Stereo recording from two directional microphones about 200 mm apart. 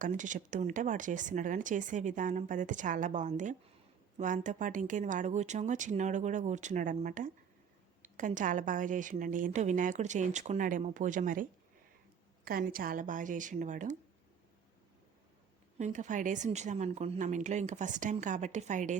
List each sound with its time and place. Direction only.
0.0 s speech: 40° right (ahead or behind)
12.5 s speech: 45° right (ahead or behind)
15.8 s speech: 40° right (ahead or behind)